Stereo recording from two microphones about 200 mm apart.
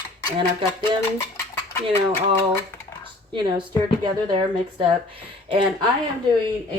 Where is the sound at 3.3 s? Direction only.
25° right (ahead or behind).